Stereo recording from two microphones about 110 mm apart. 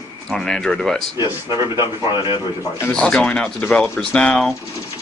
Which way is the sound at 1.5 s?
30° right (ahead or behind).